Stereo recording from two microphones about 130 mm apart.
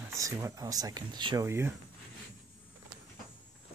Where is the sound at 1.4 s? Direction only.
20° right (ahead or behind).